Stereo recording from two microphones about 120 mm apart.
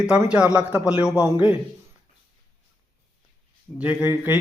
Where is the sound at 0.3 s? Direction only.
10° right (ahead or behind).